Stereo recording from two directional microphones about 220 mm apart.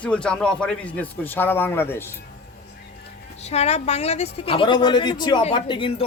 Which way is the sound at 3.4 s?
30° left (ahead or behind).